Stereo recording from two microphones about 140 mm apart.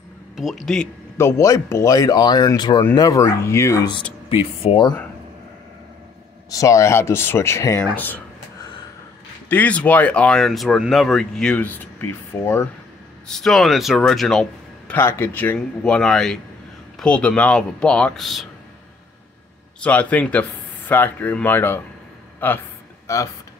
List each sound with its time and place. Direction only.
0.4 s speech: centre (ahead or behind)
1.1 s speech: 20° left (ahead or behind)
4.6 s speech: 45° left (ahead or behind)
6.5 s speech: 25° left (ahead or behind)
9.5 s speech: 10° left (ahead or behind)
13.3 s speech: 5° left (ahead or behind)
15.0 s speech: 15° left (ahead or behind); by 18.5 s centre (ahead or behind)
19.8 s speech: 10° left (ahead or behind)